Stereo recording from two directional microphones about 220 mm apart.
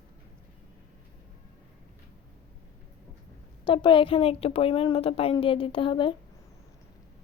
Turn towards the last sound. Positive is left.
turn(degrees=25)  # may be behind; listen again after turning